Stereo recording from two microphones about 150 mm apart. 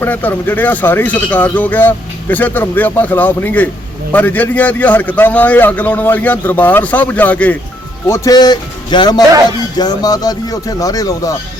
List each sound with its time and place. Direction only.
0.0 s speech: 10° left (ahead or behind)